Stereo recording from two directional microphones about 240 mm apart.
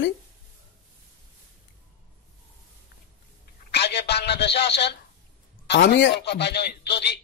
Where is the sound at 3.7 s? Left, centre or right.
Left.